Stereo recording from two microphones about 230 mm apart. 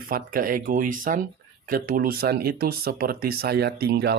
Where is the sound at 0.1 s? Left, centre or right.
Right.